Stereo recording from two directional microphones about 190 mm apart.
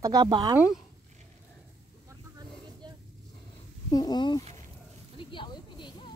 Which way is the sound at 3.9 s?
20° left (ahead or behind).